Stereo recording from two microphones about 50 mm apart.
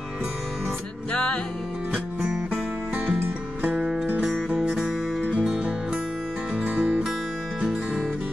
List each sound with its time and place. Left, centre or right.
1.1 s music: centre
3.6 s music: right
6.5 s music: right